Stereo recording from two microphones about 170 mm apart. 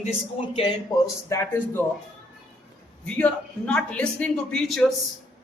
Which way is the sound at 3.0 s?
5° left (ahead or behind).